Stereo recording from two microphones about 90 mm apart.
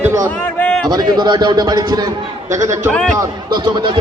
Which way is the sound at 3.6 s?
60° right (ahead or behind).